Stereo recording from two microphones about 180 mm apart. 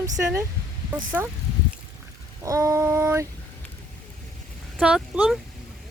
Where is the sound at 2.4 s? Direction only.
15° right (ahead or behind).